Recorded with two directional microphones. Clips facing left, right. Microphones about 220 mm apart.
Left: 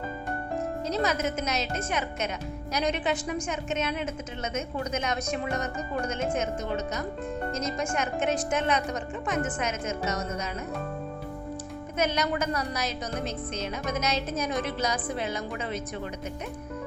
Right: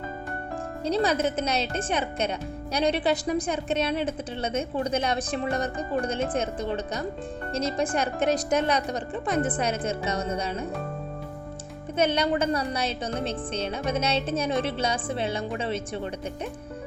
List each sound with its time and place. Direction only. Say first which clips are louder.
0.9 s a woman's voice: right 5 dB; 30° right (ahead or behind)
11.9 s a woman's voice: right 4 dB; 30° right (ahead or behind)